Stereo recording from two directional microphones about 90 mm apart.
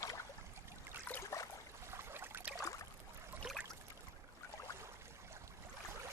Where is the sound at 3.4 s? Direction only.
5° right (ahead or behind).